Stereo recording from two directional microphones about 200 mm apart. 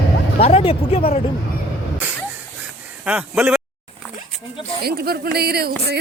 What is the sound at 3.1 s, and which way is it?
Speech, 5° right (ahead or behind).